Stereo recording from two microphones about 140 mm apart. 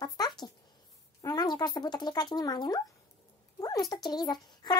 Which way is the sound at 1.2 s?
30° left (ahead or behind).